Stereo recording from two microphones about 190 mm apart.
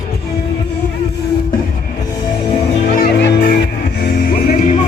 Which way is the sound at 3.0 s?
55° left (ahead or behind).